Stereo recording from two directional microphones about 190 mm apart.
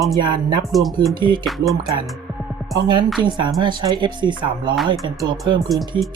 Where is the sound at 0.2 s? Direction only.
25° right (ahead or behind).